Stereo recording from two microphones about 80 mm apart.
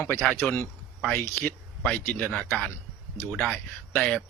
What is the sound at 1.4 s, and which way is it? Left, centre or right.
Speech, centre.